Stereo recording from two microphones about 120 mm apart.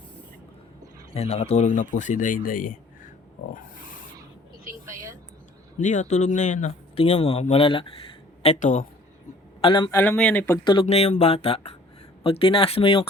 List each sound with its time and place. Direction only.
1.1 s speech: 55° left (ahead or behind); by 2.4 s 90° left
5.8 s speech: 85° left
6.9 s speech: 50° left (ahead or behind)
8.4 s speech: 75° left (ahead or behind)
9.6 s speech: 45° left (ahead or behind)
9.9 s speech: 15° left (ahead or behind)
10.6 s speech: 40° left (ahead or behind)
10.8 s speech: 65° left (ahead or behind)